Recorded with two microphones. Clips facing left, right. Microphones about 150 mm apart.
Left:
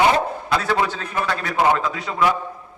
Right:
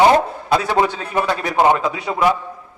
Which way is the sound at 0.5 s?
20° right (ahead or behind).